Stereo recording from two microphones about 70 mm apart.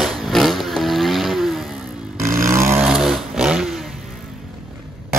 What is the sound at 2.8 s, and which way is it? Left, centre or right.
Vehicle, centre.